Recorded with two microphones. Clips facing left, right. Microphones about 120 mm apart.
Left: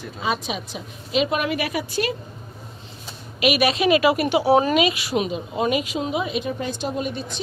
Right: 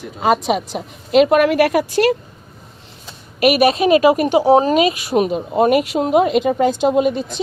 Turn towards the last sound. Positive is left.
turn(degrees=-90)